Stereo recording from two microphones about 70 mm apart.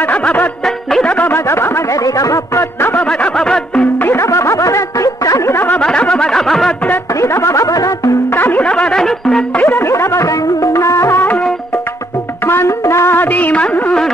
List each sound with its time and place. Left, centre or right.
0.2 s music: left
0.7 s music: centre
1.0 s music: left
1.3 s speech: left
2.0 s music: left
3.0 s music: centre
4.2 s music: left
5.5 s a sound: left
5.8 s a sound: centre
7.2 s music: left
8.3 s music: left
8.6 s music: centre
9.6 s music: left
12.4 s music: left; by 13.9 s centre